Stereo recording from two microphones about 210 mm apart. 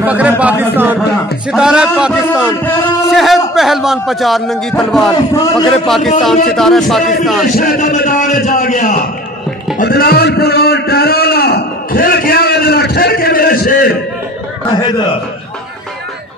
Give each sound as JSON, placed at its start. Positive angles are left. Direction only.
{"t": 0.0, "sound": "a man's voice", "side_deg": -5}
{"t": 5.3, "sound": "a man's voice", "side_deg": 15}
{"t": 6.5, "sound": "a man's voice", "side_deg": 0}
{"t": 7.4, "sound": "a man's voice", "side_deg": 40}
{"t": 9.8, "sound": "a sound", "side_deg": 45}